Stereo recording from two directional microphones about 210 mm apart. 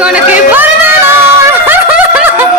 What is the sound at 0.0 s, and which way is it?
Chatter, 5° right (ahead or behind).